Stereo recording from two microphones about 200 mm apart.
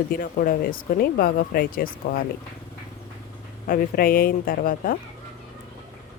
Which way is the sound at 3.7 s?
45° left (ahead or behind).